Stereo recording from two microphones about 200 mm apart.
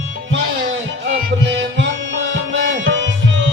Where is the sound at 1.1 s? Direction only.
60° right (ahead or behind).